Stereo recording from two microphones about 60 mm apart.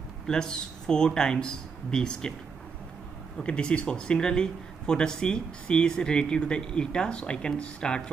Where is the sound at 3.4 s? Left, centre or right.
Centre.